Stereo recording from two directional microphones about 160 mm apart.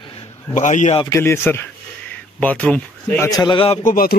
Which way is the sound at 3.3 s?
30° left (ahead or behind).